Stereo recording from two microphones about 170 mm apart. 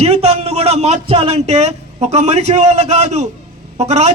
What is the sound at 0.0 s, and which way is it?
A man's voice, 40° right (ahead or behind).